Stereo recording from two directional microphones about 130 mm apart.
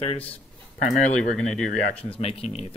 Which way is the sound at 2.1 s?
50° left (ahead or behind).